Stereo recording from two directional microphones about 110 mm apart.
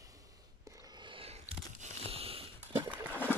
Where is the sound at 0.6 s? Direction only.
35° right (ahead or behind); by 1.3 s 50° right (ahead or behind).